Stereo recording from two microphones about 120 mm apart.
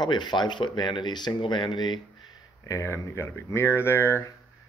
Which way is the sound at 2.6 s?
25° left (ahead or behind).